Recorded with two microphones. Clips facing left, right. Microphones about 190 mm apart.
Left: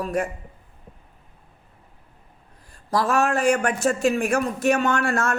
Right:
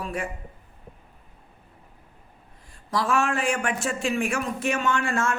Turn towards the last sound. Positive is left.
turn(degrees=40)  # may be behind; listen again after turning